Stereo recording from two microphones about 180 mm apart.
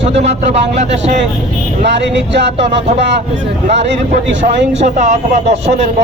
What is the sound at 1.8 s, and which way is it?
Speech, 80° right.